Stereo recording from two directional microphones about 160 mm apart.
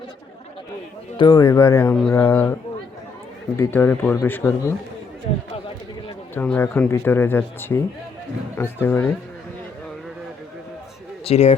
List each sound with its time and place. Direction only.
1.1 s speech: 25° left (ahead or behind)
3.6 s speech: 10° left (ahead or behind)
6.3 s speech: 10° left (ahead or behind)
11.3 s speech: 45° left (ahead or behind)